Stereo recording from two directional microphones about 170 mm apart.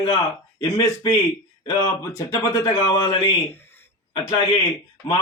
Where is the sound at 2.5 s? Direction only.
20° left (ahead or behind).